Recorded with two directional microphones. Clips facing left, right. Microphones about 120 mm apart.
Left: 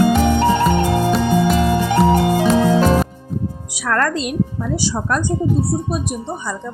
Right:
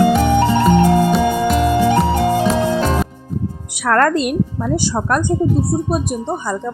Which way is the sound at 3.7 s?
55° right (ahead or behind).